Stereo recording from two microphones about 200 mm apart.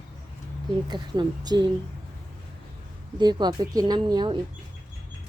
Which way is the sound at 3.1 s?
20° right (ahead or behind).